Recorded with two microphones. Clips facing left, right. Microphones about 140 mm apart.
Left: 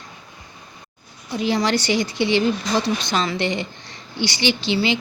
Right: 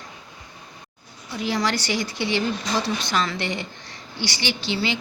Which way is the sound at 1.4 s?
20° left (ahead or behind).